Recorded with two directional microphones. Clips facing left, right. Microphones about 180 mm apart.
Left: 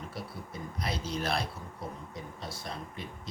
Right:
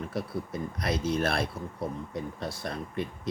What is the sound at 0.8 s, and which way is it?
Speech, 60° right (ahead or behind).